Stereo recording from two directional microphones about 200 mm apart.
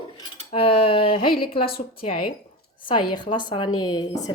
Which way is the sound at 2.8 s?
25° left (ahead or behind).